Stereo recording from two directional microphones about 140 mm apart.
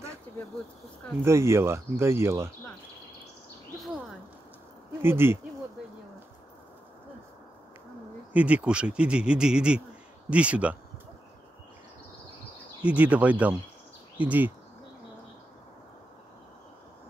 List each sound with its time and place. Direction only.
1.2 s speech: 20° right (ahead or behind)
5.0 s speech: 15° right (ahead or behind)
8.3 s speech: 10° right (ahead or behind)
12.8 s speech: 10° right (ahead or behind)